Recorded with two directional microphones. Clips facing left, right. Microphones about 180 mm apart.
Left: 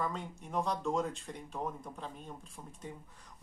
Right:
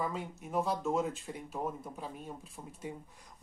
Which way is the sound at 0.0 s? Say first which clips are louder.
Right 1 dB; 5° right (ahead or behind).